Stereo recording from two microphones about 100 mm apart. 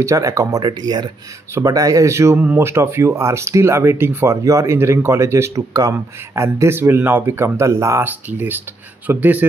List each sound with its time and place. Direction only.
0.0 s speech: 30° right (ahead or behind)
8.0 s speech: 20° right (ahead or behind)